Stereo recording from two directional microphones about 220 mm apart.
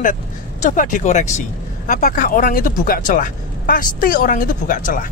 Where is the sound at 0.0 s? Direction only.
35° left (ahead or behind).